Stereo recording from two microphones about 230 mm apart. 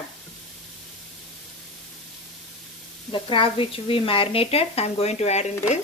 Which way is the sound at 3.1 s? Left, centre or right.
Left.